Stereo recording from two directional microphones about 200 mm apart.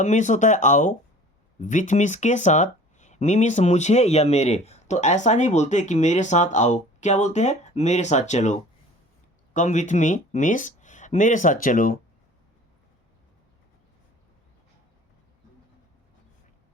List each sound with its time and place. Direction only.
0.0 s speech: 35° left (ahead or behind)